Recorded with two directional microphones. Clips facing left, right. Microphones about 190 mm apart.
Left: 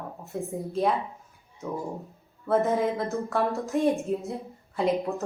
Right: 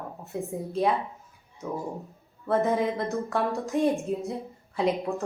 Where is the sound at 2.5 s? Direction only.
Centre (ahead or behind).